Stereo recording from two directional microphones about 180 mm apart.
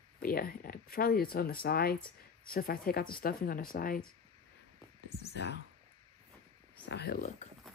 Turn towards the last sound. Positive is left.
turn(degrees=60)  # may be behind; listen again after turning